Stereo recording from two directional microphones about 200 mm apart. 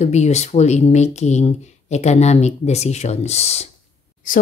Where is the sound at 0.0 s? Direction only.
35° left (ahead or behind).